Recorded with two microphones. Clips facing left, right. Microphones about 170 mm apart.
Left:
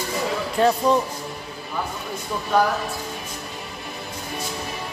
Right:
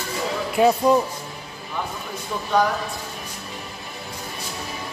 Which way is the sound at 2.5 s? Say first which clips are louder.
Even; 5° left (ahead or behind).